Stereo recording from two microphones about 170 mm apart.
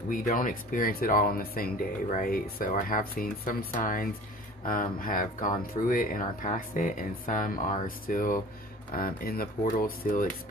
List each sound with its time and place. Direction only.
0.1 s speech: 50° left (ahead or behind)